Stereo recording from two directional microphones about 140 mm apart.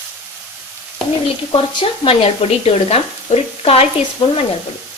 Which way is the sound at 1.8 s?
40° left (ahead or behind).